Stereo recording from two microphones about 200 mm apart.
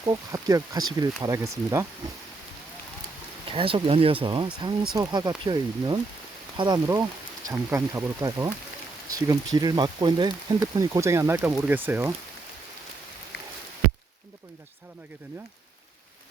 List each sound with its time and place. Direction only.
0.0 s speech: 15° right (ahead or behind)
3.4 s speech: 25° right (ahead or behind); by 12.1 s 10° right (ahead or behind)